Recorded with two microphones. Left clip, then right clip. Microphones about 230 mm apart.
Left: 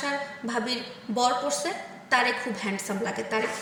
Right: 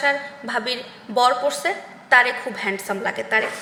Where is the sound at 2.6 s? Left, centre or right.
Centre.